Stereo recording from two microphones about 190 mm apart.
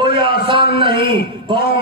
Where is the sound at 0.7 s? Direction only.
25° right (ahead or behind).